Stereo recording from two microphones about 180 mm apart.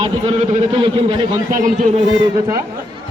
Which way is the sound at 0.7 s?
30° right (ahead or behind).